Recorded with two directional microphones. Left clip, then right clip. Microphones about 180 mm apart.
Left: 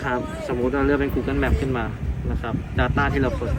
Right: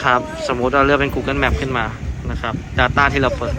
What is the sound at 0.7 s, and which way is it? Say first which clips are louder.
Speech: right 8 dB; 40° left (ahead or behind).